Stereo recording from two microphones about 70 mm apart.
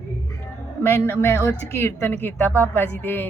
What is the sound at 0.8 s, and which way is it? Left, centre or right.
A woman's voice, left.